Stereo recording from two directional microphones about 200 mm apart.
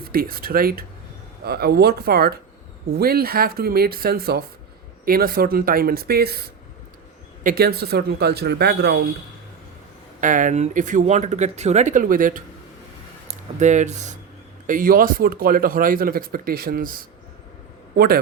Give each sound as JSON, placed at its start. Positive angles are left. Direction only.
{"t": 0.1, "sound": "speech", "side_deg": -45}
{"t": 7.4, "sound": "speech", "side_deg": -50}
{"t": 10.2, "sound": "a man's voice", "side_deg": -40}